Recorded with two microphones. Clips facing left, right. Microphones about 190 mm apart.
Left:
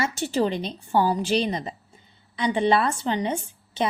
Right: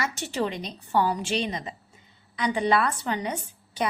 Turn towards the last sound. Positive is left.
turn(degrees=25)  # may be behind; listen again after turning